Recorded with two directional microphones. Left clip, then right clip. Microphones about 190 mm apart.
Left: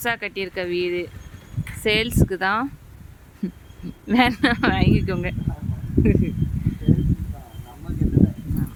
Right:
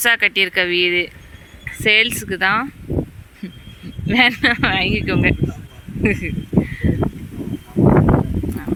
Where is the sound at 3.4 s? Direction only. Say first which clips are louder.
Left 3 dB; 25° left (ahead or behind).